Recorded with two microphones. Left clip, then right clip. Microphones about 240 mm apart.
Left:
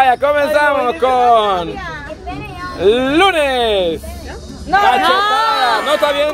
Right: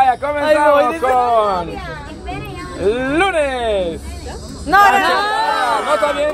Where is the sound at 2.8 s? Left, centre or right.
Left.